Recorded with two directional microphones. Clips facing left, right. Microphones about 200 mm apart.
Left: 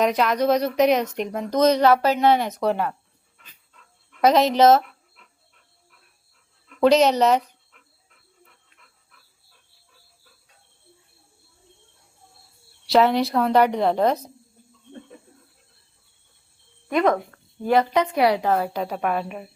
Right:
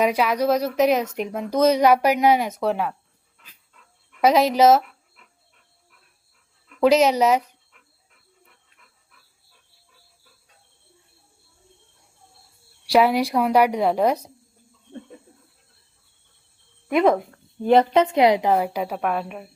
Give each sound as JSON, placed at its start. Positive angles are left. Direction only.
{"t": 0.0, "sound": "speech", "side_deg": -10}
{"t": 3.3, "sound": "dog", "side_deg": -5}
{"t": 6.7, "sound": "dog", "side_deg": -5}
{"t": 12.8, "sound": "speech", "side_deg": -10}
{"t": 16.9, "sound": "speech", "side_deg": -5}
{"t": 17.3, "sound": "speech", "side_deg": -20}